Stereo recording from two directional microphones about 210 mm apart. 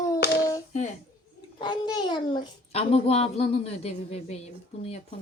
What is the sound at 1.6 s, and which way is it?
A man's voice, 20° left (ahead or behind).